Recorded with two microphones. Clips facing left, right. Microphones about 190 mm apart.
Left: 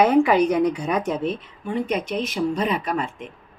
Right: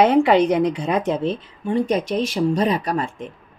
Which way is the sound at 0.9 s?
30° right (ahead or behind).